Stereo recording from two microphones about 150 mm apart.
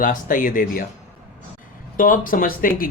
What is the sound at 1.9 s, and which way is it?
Speech, 60° left (ahead or behind).